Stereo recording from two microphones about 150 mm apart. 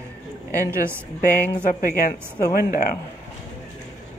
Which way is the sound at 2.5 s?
80° left.